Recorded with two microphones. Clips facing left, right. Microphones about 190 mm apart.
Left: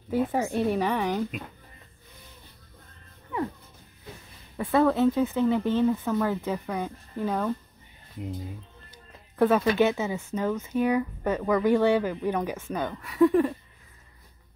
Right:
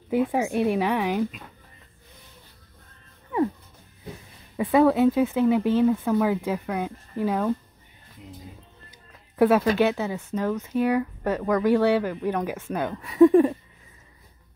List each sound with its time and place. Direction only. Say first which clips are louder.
0.1 s speech: right 3 dB; 10° right (ahead or behind)
4.6 s speech: right 3 dB; 15° right (ahead or behind)
9.8 s speech: right 1 dB; centre (ahead or behind)
12.9 s speech: right 5 dB; 25° right (ahead or behind)